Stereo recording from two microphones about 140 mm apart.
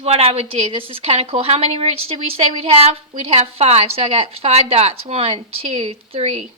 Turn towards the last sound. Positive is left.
turn(degrees=-50)  # may be behind; listen again after turning